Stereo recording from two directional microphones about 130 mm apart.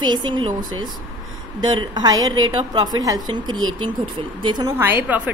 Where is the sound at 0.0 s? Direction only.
35° right (ahead or behind).